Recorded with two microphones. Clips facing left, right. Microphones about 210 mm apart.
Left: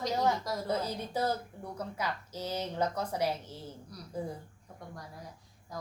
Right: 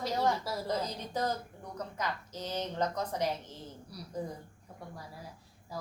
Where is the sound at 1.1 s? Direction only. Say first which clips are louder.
Left 1 dB; 10° left (ahead or behind).